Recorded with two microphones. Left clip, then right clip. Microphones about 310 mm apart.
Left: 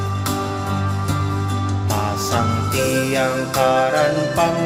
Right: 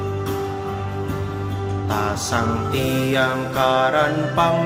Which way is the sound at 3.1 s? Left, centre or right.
Centre.